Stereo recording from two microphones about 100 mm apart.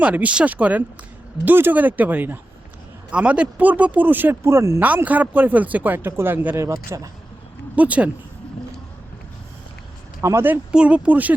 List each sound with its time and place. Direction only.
0.0 s speech: 15° right (ahead or behind)
4.8 s speech: 15° right (ahead or behind)
6.6 s speech: 30° right (ahead or behind)
7.8 s speech: 15° right (ahead or behind)
10.2 s speech: 25° right (ahead or behind)